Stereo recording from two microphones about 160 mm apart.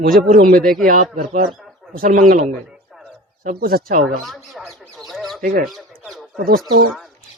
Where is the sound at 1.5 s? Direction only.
Centre (ahead or behind).